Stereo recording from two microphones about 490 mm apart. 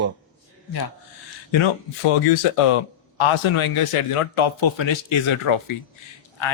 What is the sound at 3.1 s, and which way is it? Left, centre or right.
A man's voice, left.